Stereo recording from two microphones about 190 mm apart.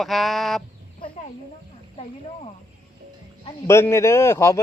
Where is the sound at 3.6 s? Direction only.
15° left (ahead or behind).